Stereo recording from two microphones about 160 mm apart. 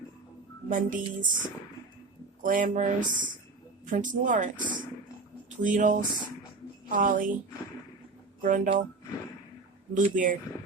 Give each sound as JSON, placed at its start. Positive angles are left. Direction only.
{"t": 0.7, "sound": "speech", "side_deg": -55}
{"t": 2.4, "sound": "speech", "side_deg": -60}
{"t": 8.4, "sound": "speech", "side_deg": -55}
{"t": 9.9, "sound": "speech", "side_deg": -55}